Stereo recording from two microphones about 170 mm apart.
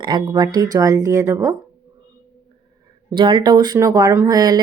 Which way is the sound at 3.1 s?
30° right (ahead or behind).